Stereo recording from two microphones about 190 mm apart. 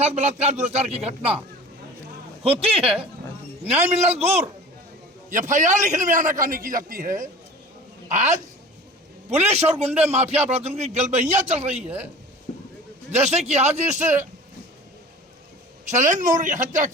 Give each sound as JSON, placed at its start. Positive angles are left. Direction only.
{"t": 0.0, "sound": "a man's voice", "side_deg": -35}
{"t": 4.1, "sound": "a man's voice", "side_deg": -35}
{"t": 11.9, "sound": "speech", "side_deg": -10}
{"t": 13.1, "sound": "a man's voice", "side_deg": -35}
{"t": 15.9, "sound": "a man's voice", "side_deg": -40}